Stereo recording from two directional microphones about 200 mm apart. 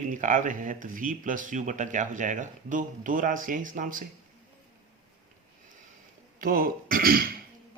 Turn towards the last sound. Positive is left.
turn(degrees=-45)  # may be behind; listen again after turning